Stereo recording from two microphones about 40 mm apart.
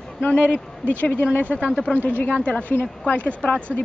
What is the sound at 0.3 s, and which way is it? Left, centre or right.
Speech, left.